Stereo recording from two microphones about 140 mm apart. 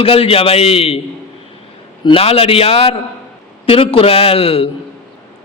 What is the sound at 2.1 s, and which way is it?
A man's voice, 45° left (ahead or behind).